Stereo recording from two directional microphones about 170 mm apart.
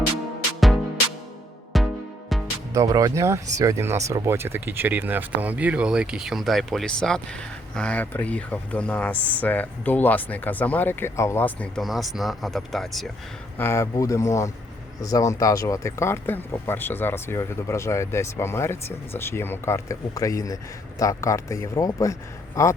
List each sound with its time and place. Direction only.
1.7 s music: centre (ahead or behind)
2.7 s speech: 20° right (ahead or behind); by 13.1 s centre (ahead or behind)
13.6 s speech: 15° left (ahead or behind)